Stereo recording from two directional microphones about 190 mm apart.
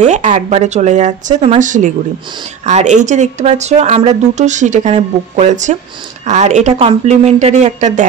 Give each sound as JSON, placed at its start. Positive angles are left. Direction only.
{"t": 0.0, "sound": "speech", "side_deg": -40}